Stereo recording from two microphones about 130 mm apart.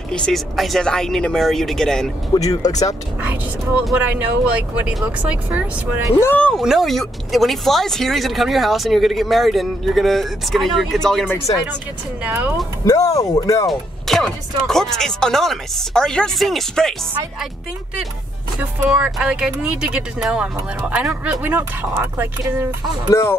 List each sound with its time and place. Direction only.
0.1 s speech: 5° left (ahead or behind)
2.3 s speech: 30° left (ahead or behind)
3.2 s speech: 15° right (ahead or behind)
6.2 s speech: 10° left (ahead or behind)
6.6 s speech: centre (ahead or behind)
11.5 s speech: 45° left (ahead or behind)
12.2 s speech: 15° right (ahead or behind)
12.8 s speech: 25° left (ahead or behind)
13.7 s speech: centre (ahead or behind)
18.6 s speech: 10° right (ahead or behind)